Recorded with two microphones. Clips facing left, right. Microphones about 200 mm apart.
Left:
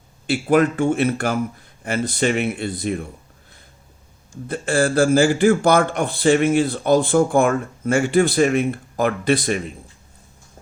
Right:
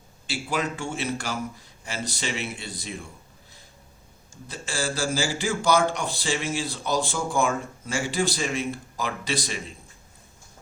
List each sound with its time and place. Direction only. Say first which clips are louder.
0.3 s a man's voice: left 12 dB; 55° left (ahead or behind)
4.4 s a man's voice: left 11 dB; 55° left (ahead or behind)